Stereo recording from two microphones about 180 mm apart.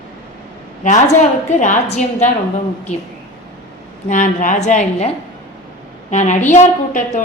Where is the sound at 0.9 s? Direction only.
40° left (ahead or behind).